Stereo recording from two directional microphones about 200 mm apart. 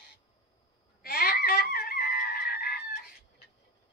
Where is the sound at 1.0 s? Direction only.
50° left (ahead or behind).